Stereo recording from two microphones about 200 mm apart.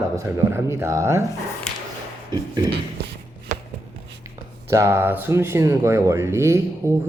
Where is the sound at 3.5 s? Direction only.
40° right (ahead or behind).